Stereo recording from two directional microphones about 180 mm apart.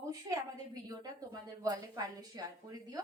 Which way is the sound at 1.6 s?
20° right (ahead or behind).